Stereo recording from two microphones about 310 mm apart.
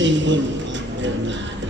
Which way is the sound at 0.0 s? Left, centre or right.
Right.